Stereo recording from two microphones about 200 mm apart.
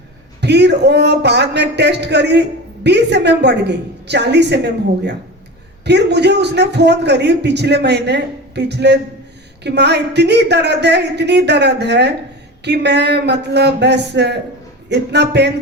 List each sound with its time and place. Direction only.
0.4 s a man's voice: 60° right (ahead or behind)